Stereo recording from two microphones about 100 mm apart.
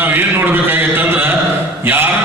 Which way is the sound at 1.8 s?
20° right (ahead or behind).